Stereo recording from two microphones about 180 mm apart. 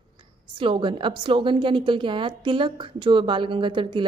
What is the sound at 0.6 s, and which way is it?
A woman's voice, 25° right (ahead or behind).